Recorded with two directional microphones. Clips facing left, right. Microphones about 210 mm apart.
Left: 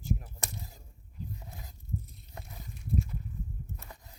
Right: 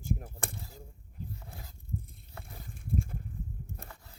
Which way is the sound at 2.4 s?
50° right (ahead or behind).